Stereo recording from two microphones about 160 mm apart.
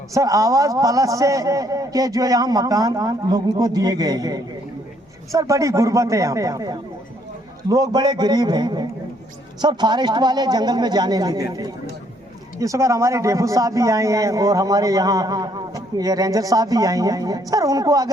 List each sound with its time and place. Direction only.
0.1 s a man's voice: 20° right (ahead or behind)